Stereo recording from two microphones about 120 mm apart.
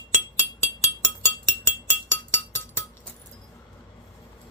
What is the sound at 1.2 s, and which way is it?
Music, 20° left (ahead or behind).